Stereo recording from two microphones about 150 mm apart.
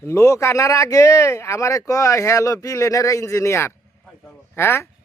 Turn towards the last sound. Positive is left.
turn(degrees=15)  # may be behind; listen again after turning